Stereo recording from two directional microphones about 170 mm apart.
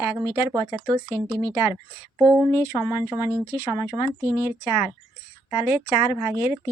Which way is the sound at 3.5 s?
20° left (ahead or behind).